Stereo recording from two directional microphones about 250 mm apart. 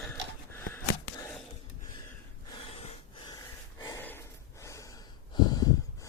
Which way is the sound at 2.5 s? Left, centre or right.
Left.